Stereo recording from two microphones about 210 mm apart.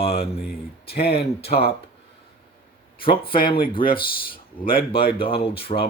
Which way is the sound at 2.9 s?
45° left (ahead or behind).